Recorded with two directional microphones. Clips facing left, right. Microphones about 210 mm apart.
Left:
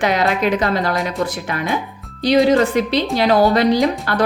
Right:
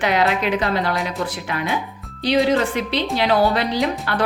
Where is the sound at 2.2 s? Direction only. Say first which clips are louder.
Left 4 dB; 40° left (ahead or behind).